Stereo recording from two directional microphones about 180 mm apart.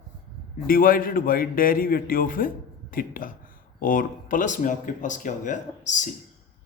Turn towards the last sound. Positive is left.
turn(degrees=45)  # may be behind; listen again after turning